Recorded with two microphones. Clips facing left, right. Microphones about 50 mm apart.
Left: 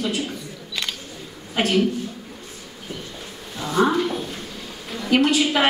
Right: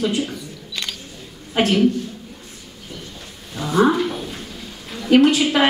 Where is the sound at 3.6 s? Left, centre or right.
Centre.